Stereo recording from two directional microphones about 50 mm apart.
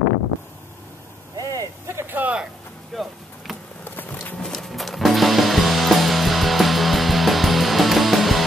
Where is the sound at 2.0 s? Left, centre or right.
Right.